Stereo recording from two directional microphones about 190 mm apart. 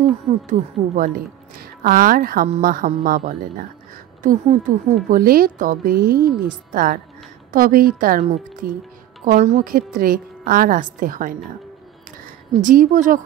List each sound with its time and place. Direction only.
0.0 s a woman's voice: 45° right (ahead or behind)
12.5 s a woman's voice: 45° right (ahead or behind)